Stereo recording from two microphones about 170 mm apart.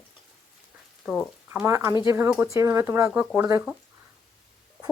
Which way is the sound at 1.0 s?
5° left (ahead or behind).